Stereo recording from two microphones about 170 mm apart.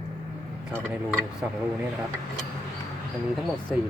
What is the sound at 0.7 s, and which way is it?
Speech, 10° right (ahead or behind).